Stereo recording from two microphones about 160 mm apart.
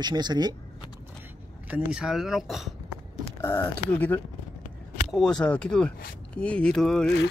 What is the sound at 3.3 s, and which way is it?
Speech, 15° left (ahead or behind).